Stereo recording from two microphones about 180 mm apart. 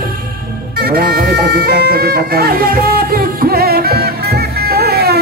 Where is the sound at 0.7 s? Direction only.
55° right (ahead or behind).